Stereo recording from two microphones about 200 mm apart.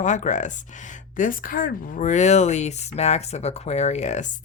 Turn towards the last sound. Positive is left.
turn(degrees=35)  # may be behind; listen again after turning